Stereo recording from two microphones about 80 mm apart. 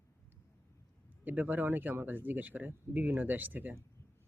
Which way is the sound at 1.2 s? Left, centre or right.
Right.